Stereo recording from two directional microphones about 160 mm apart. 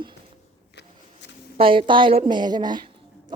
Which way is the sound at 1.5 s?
35° right (ahead or behind).